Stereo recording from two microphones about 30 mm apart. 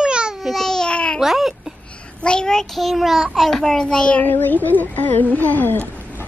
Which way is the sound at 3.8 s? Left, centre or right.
Left.